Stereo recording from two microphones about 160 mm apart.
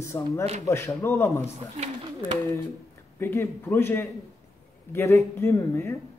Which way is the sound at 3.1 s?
15° left (ahead or behind).